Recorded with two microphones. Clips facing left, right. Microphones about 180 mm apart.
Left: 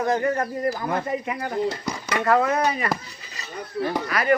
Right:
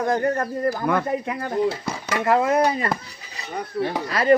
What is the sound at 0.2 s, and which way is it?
Speech, 45° right (ahead or behind).